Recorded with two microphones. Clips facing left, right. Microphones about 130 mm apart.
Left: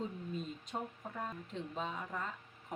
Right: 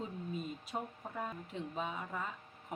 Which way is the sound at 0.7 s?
5° right (ahead or behind).